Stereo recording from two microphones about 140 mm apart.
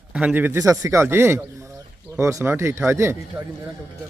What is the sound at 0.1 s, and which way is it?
Speech, 10° right (ahead or behind).